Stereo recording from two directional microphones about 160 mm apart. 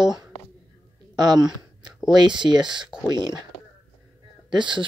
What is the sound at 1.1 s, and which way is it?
Speech, 25° right (ahead or behind).